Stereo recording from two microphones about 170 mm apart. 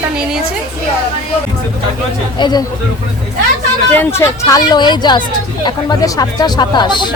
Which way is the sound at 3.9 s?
15° left (ahead or behind).